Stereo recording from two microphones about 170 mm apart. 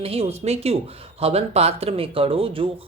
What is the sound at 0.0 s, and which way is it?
Speech, 35° right (ahead or behind).